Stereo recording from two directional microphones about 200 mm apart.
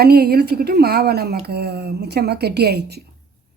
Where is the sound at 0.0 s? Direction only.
50° right (ahead or behind).